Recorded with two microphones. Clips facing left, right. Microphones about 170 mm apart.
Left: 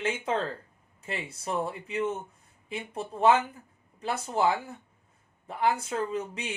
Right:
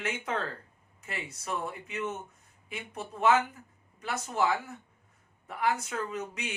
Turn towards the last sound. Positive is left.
turn(degrees=30)  # may be behind; listen again after turning